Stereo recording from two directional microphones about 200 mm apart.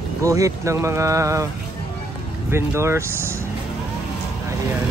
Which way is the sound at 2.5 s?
15° right (ahead or behind).